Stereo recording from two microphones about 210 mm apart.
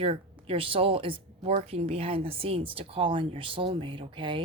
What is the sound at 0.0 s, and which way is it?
Speech, 25° right (ahead or behind).